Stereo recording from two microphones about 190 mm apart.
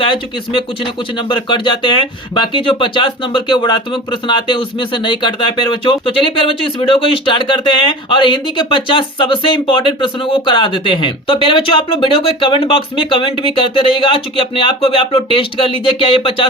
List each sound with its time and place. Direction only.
0.0 s speech: 25° left (ahead or behind)